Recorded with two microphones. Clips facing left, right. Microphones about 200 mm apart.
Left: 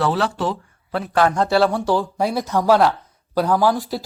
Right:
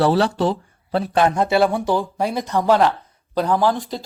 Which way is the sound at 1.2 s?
20° right (ahead or behind).